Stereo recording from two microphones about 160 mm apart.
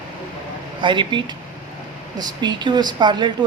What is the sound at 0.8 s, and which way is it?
A woman's voice, 30° right (ahead or behind).